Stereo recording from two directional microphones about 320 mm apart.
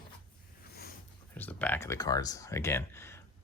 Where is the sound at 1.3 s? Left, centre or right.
Centre.